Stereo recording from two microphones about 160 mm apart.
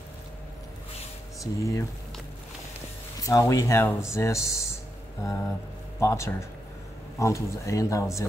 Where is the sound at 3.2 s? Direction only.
20° left (ahead or behind).